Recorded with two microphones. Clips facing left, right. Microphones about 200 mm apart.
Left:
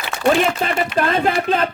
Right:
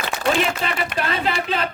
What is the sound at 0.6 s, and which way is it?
A man's voice, 45° left (ahead or behind).